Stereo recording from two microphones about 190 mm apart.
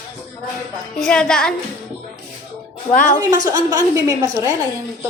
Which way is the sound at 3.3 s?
20° right (ahead or behind).